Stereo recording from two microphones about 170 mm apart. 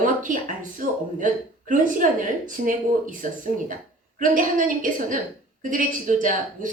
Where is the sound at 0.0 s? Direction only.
50° right (ahead or behind).